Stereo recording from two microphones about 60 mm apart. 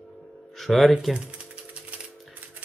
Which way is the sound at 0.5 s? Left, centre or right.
Centre.